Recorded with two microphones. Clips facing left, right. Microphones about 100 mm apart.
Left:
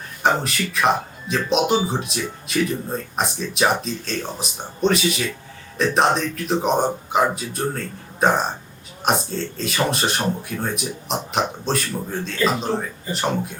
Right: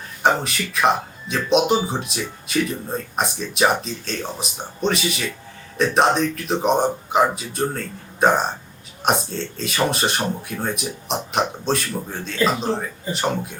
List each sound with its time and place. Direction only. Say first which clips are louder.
0.2 s speech: right 1 dB; centre (ahead or behind)